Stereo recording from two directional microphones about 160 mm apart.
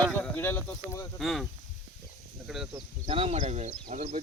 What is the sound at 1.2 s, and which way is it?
Speech, centre (ahead or behind).